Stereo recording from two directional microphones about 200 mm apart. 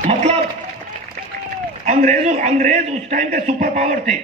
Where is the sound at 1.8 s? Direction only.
35° right (ahead or behind).